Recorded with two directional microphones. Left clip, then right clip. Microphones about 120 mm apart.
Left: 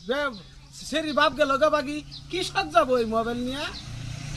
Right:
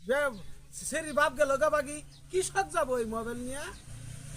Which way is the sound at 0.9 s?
50° right (ahead or behind).